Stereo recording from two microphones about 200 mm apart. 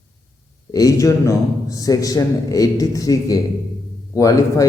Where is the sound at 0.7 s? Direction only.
15° left (ahead or behind).